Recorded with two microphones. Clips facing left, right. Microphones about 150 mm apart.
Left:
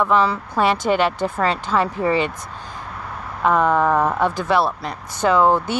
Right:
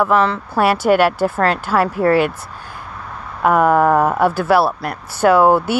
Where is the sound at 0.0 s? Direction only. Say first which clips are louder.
Right 2 dB; centre (ahead or behind).